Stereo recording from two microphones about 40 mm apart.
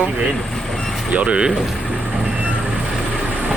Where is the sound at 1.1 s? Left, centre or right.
Right.